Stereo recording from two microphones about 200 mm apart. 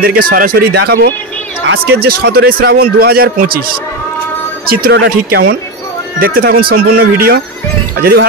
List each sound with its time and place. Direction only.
0.0 s a man's voice: 45° right (ahead or behind)
4.6 s a man's voice: 55° right (ahead or behind)